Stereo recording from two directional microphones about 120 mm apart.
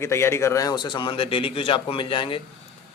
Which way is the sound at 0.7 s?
40° left (ahead or behind).